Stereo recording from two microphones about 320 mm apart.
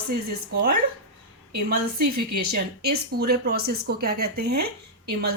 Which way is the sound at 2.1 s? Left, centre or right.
Right.